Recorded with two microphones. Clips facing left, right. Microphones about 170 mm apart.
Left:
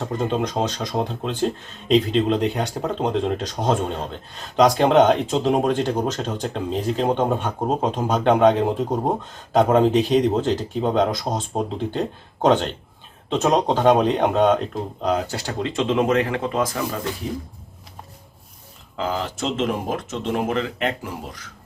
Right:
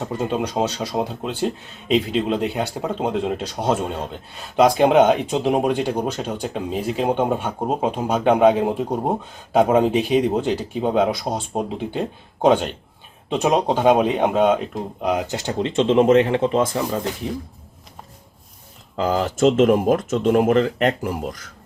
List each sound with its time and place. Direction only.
0.0 s speech: 5° right (ahead or behind); by 17.1 s 25° right (ahead or behind)
18.9 s speech: 45° right (ahead or behind)